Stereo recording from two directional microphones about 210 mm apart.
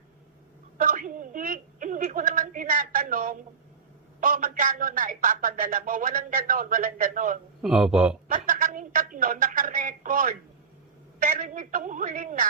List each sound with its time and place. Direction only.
0.8 s a sound: 40° right (ahead or behind)
4.2 s a man's voice: 40° right (ahead or behind)
7.6 s a man's voice: 5° right (ahead or behind)
8.3 s a woman's voice: 40° right (ahead or behind)